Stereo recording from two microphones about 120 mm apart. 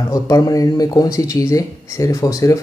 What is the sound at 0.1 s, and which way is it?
Speech, 30° left (ahead or behind).